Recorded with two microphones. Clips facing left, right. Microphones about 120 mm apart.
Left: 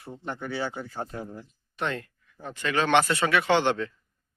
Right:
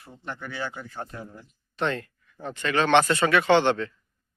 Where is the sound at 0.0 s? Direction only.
25° left (ahead or behind).